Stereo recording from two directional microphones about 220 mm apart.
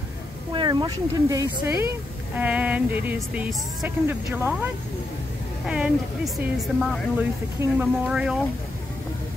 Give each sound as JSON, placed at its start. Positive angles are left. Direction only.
{"t": 0.5, "sound": "speech", "side_deg": -20}
{"t": 5.7, "sound": "speech", "side_deg": 0}